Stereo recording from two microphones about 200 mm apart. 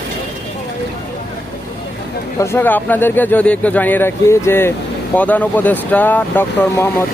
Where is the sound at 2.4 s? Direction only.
10° left (ahead or behind).